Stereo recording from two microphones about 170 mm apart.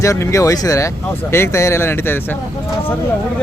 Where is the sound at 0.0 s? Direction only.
20° left (ahead or behind).